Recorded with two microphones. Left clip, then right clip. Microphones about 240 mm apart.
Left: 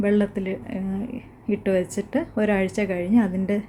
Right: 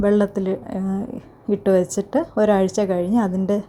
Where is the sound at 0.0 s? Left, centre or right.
Centre.